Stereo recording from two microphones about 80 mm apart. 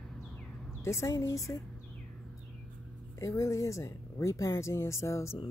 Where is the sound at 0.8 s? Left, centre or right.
Left.